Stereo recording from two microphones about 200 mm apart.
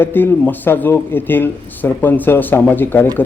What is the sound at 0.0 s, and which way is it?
A man's voice, 10° left (ahead or behind).